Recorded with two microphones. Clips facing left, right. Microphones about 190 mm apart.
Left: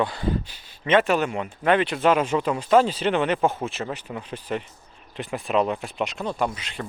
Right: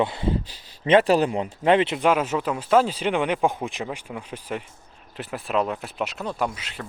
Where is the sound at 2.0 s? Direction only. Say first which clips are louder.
Left 1 dB; 5° right (ahead or behind).